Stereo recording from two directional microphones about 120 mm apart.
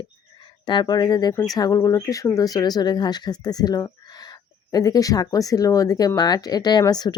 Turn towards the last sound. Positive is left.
turn(degrees=35)  # may be behind; listen again after turning